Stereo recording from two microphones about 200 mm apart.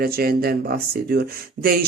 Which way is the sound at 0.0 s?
50° right (ahead or behind).